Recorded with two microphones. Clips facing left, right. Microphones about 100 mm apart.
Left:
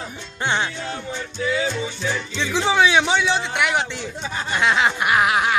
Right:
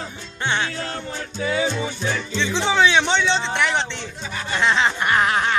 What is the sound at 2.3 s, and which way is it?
Music, 10° left (ahead or behind).